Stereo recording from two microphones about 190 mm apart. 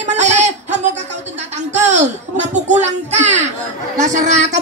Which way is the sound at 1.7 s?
35° right (ahead or behind).